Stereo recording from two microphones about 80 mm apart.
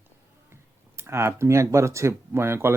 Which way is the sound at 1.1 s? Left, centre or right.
Right.